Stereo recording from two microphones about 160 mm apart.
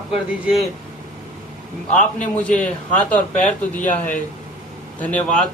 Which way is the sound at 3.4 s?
10° left (ahead or behind).